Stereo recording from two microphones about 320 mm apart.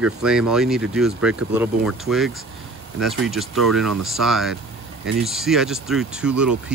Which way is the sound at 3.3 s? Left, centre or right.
Centre.